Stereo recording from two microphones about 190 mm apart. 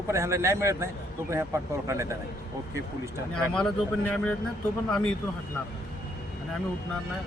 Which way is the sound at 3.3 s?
5° left (ahead or behind).